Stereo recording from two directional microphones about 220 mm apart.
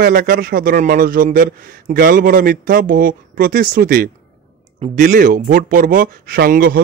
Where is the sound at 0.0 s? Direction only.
40° right (ahead or behind).